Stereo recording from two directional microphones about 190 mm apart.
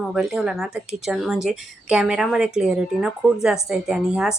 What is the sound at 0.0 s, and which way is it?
Speech, centre (ahead or behind).